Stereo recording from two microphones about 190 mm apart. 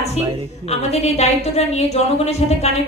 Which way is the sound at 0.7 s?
35° left (ahead or behind).